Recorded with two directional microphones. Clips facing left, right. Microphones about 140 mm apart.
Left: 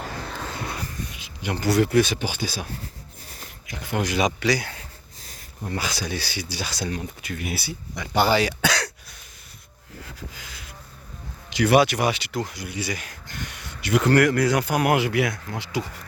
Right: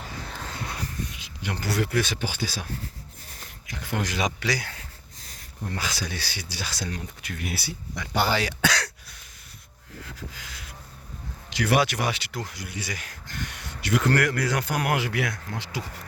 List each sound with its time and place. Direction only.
0.0 s a sound: 90° left
1.1 s speech: 10° left (ahead or behind)
3.2 s a sound: 10° left (ahead or behind)
5.7 s speech: 15° left (ahead or behind)
7.2 s speech: 5° left (ahead or behind)
11.5 s speech: 20° left (ahead or behind)